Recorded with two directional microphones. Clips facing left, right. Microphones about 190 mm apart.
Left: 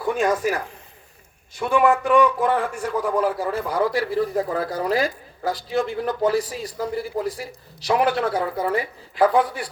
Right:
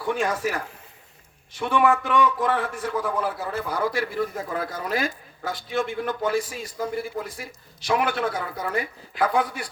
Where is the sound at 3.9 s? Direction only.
35° left (ahead or behind).